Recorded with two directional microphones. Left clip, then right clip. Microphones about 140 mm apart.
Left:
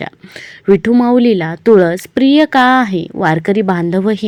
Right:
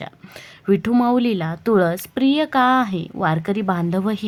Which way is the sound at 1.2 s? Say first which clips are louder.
Left 9 dB; 20° left (ahead or behind).